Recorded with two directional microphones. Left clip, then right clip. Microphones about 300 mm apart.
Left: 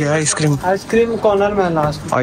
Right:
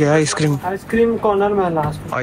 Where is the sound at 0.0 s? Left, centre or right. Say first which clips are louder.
Right 2 dB; centre.